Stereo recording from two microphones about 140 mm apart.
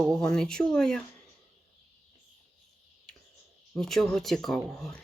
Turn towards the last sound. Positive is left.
turn(degrees=0)  # may be behind; listen again after turning